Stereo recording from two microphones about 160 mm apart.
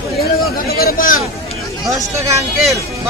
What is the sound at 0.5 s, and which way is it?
Speech, 65° left (ahead or behind).